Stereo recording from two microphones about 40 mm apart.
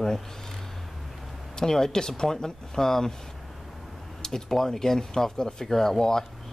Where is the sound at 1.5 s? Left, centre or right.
Centre.